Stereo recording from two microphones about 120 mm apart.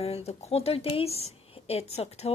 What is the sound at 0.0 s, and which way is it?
Speech, 60° left (ahead or behind).